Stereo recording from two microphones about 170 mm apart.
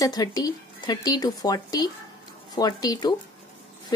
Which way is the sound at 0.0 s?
20° left (ahead or behind).